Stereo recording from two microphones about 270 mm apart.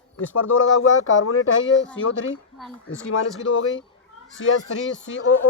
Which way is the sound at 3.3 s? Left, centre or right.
Left.